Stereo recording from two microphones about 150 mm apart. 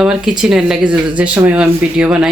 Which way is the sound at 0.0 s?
5° right (ahead or behind).